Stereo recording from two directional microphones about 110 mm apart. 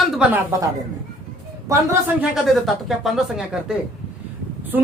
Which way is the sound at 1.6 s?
30° right (ahead or behind).